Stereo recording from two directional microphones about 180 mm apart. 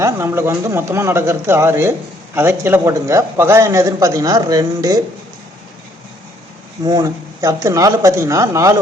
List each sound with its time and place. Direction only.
0.0 s a man's voice: 15° right (ahead or behind)
6.8 s a man's voice: 20° right (ahead or behind)